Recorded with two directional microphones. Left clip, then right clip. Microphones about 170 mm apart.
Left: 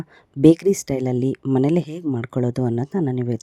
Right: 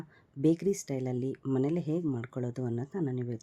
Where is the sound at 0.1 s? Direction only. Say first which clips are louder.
Left 14 dB; 50° left (ahead or behind).